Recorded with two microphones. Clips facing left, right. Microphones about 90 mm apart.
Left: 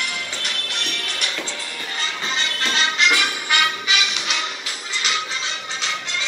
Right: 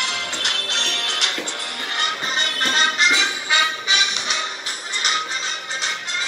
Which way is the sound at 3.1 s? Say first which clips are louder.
Even; 25° right (ahead or behind).